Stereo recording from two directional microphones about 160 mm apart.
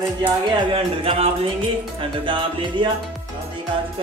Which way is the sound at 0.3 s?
30° right (ahead or behind).